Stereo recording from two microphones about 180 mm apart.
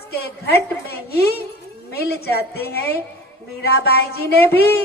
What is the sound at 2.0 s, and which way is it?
A woman's voice, 60° left (ahead or behind).